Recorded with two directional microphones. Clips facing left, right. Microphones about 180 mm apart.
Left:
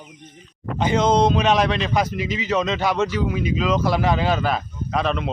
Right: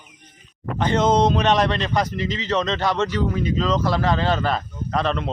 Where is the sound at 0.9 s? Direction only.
Centre (ahead or behind).